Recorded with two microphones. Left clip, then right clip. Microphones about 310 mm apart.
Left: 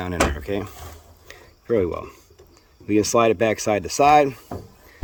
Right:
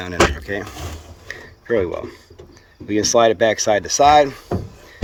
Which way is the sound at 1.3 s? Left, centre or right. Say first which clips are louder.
Right 2 dB; left.